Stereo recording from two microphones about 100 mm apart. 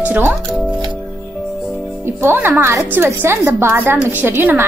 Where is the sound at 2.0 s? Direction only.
25° right (ahead or behind).